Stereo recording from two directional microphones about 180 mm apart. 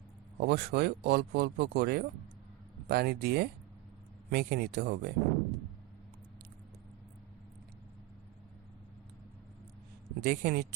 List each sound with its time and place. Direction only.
0.3 s speech: 65° right (ahead or behind)
10.2 s speech: 55° right (ahead or behind)